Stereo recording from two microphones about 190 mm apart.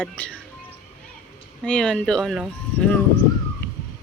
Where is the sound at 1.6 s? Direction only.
5° left (ahead or behind).